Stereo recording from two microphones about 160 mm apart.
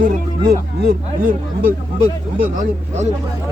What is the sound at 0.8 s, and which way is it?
Speech, 60° right (ahead or behind).